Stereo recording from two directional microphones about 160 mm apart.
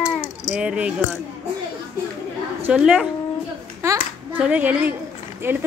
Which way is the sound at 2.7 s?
Centre (ahead or behind).